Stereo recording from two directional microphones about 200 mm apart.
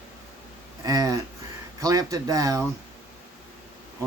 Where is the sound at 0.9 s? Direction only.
15° right (ahead or behind).